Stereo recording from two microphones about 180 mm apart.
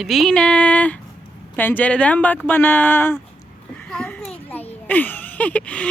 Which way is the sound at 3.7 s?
10° left (ahead or behind).